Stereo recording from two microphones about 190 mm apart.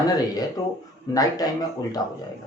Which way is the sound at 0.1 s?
20° left (ahead or behind).